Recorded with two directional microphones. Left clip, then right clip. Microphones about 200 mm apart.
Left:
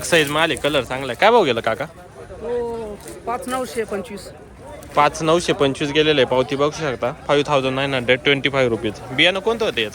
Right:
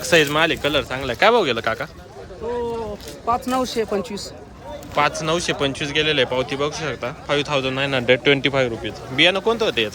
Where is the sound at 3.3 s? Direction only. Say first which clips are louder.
Right 3 dB; 50° right (ahead or behind).